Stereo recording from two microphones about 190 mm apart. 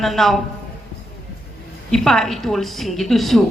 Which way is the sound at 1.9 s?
Centre (ahead or behind).